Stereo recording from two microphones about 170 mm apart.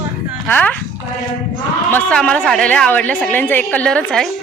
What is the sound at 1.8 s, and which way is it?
A woman's voice, 5° left (ahead or behind).